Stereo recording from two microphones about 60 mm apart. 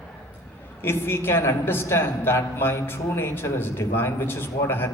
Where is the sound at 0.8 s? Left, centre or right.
Left.